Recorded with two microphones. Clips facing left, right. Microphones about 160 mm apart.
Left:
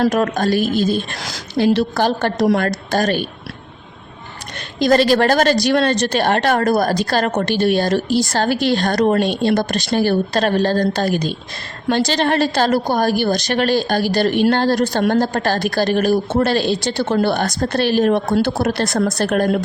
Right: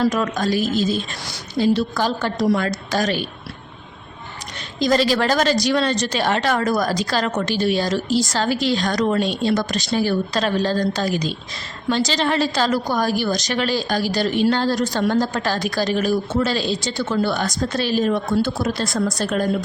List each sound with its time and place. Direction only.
0.1 s speech: 60° left (ahead or behind)
1.2 s a woman's voice: 80° left; by 3.2 s 50° left (ahead or behind)
4.8 s a woman's voice: 60° left (ahead or behind)